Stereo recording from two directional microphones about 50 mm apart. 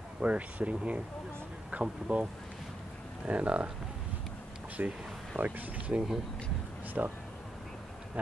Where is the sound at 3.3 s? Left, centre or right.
Right.